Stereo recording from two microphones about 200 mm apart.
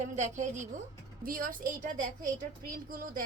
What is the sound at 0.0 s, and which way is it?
A child's voice, 35° right (ahead or behind).